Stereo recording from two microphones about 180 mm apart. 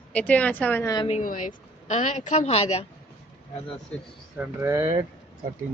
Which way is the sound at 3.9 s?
5° left (ahead or behind).